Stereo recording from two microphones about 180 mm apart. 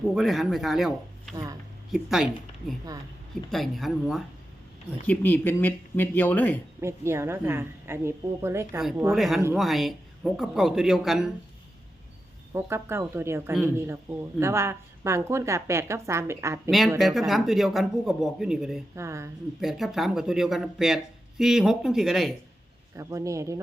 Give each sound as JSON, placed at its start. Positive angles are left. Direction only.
{"t": 0.1, "sound": "speech", "side_deg": 0}
{"t": 5.0, "sound": "speech", "side_deg": 10}
{"t": 6.8, "sound": "speech", "side_deg": -15}
{"t": 9.1, "sound": "speech", "side_deg": 0}
{"t": 12.5, "sound": "speech", "side_deg": -15}
{"t": 16.6, "sound": "speech", "side_deg": 0}
{"t": 18.9, "sound": "speech", "side_deg": -15}
{"t": 19.6, "sound": "speech", "side_deg": 0}
{"t": 23.0, "sound": "speech", "side_deg": -15}